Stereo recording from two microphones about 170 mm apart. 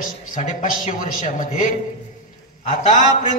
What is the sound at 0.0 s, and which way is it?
A man's voice, 55° left (ahead or behind).